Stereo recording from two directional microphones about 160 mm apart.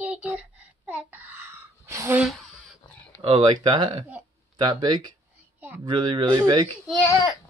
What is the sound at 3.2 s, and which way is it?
Speech, 35° right (ahead or behind).